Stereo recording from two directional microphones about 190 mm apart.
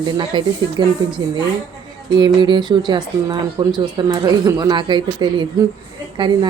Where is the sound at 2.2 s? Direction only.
25° right (ahead or behind).